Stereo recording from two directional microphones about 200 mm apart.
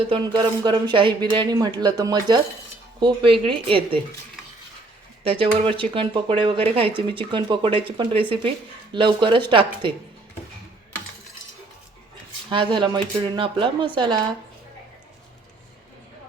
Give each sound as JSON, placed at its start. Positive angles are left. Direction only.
{"t": 0.1, "sound": "speech", "side_deg": -25}
{"t": 5.2, "sound": "speech", "side_deg": -30}
{"t": 12.5, "sound": "speech", "side_deg": -25}